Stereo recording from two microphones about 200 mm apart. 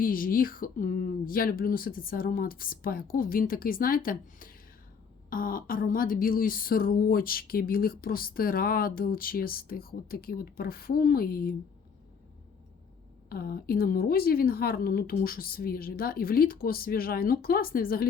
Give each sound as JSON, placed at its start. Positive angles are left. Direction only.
{"t": 0.0, "sound": "speech", "side_deg": 45}
{"t": 13.3, "sound": "speech", "side_deg": 50}